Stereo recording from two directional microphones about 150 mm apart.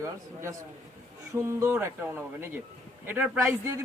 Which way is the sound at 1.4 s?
20° right (ahead or behind).